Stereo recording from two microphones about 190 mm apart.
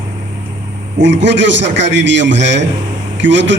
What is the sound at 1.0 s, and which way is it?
A man's voice, 70° right (ahead or behind).